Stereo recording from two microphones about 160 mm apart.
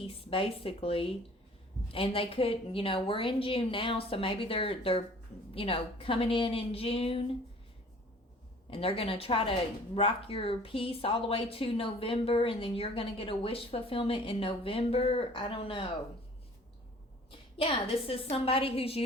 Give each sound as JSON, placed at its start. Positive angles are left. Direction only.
{"t": 0.0, "sound": "a woman's voice", "side_deg": 35}
{"t": 8.7, "sound": "speech", "side_deg": 35}
{"t": 17.6, "sound": "speech", "side_deg": 35}